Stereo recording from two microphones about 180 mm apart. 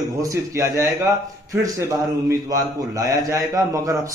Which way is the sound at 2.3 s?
20° right (ahead or behind).